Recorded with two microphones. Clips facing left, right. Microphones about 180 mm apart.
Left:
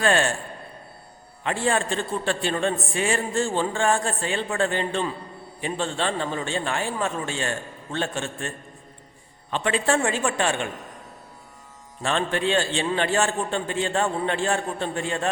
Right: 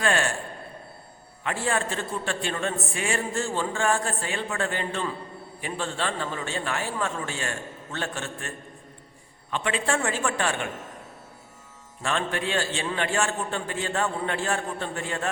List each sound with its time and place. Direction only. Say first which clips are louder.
0.0 s a man's voice: left 4 dB; 30° left (ahead or behind)
1.5 s a man's voice: left 3 dB; 30° left (ahead or behind)
12.0 s a man's voice: left 4 dB; 30° left (ahead or behind)